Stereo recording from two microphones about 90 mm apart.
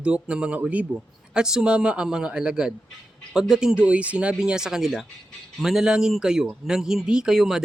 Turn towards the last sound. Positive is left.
turn(degrees=-5)  # may be behind; listen again after turning